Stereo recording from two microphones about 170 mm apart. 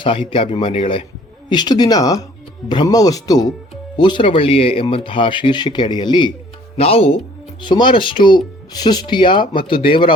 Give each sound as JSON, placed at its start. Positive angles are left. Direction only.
{"t": 0.0, "sound": "speech", "side_deg": 30}